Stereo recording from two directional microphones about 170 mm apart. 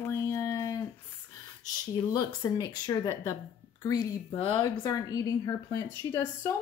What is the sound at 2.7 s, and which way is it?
A woman's voice, 25° left (ahead or behind).